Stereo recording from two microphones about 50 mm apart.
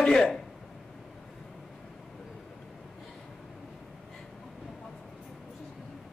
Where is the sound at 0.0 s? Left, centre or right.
Centre.